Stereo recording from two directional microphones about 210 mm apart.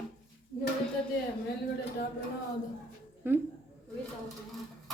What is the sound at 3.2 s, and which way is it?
Speech, 10° right (ahead or behind).